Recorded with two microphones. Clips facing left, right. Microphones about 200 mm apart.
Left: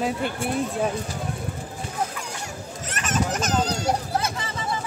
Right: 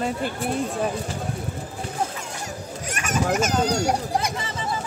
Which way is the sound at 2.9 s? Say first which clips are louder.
Right 2 dB; 10° right (ahead or behind).